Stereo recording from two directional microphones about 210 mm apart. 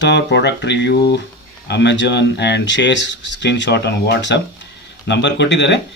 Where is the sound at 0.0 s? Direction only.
55° left (ahead or behind).